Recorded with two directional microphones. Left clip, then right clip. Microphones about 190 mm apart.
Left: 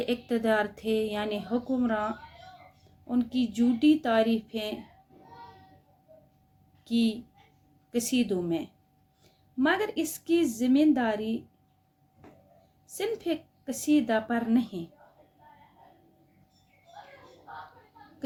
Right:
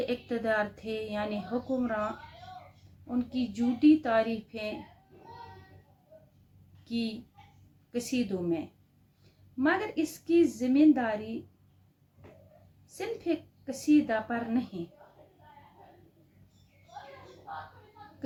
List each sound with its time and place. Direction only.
0.0 s speech: 45° left (ahead or behind)
6.8 s a woman's voice: 45° left (ahead or behind)
13.0 s speech: 45° left (ahead or behind)